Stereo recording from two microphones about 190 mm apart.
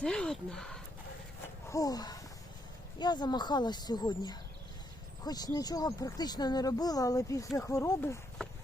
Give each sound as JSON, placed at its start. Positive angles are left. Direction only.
{"t": 0.0, "sound": "speech", "side_deg": 5}
{"t": 1.7, "sound": "speech", "side_deg": 20}